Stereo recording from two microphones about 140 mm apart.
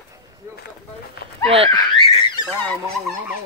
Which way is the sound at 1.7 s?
40° left (ahead or behind).